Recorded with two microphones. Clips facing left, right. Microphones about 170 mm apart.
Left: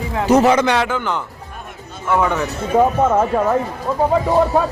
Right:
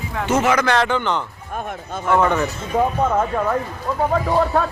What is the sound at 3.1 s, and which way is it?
Speech, 20° left (ahead or behind).